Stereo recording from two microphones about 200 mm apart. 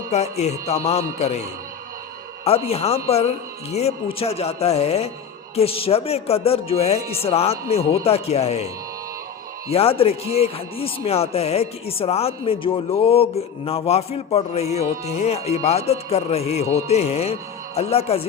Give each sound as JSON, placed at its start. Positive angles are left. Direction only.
{"t": 0.1, "sound": "speech", "side_deg": 35}
{"t": 2.6, "sound": "speech", "side_deg": 30}
{"t": 9.6, "sound": "speech", "side_deg": 30}